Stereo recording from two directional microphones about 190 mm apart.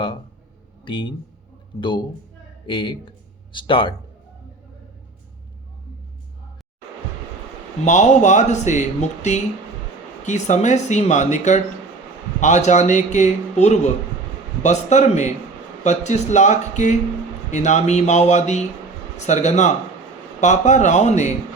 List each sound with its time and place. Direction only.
0.9 s speech: 25° left (ahead or behind)
7.9 s speech: 40° left (ahead or behind)